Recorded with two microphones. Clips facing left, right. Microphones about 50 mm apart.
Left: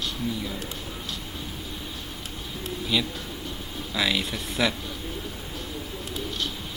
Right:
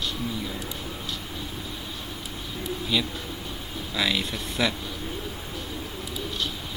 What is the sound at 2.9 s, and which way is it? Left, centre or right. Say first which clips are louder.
Speech: left 1 dB; centre.